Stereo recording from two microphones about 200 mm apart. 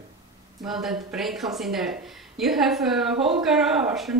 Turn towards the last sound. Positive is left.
turn(degrees=0)  # may be behind; listen again after turning